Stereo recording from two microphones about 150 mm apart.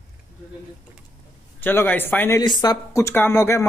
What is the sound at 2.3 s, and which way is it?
Speech, 30° left (ahead or behind).